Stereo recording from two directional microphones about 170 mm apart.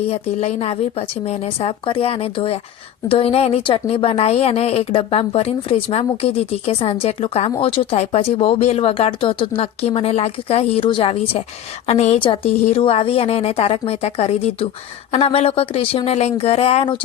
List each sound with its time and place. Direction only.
0.1 s a woman's voice: 35° left (ahead or behind)